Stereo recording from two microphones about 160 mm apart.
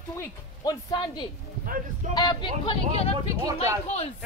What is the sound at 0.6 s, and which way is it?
Speech, 25° left (ahead or behind).